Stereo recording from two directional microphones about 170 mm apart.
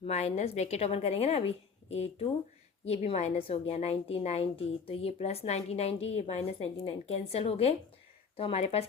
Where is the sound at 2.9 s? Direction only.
40° left (ahead or behind).